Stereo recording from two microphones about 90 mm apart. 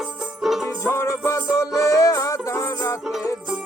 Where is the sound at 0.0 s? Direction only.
5° right (ahead or behind).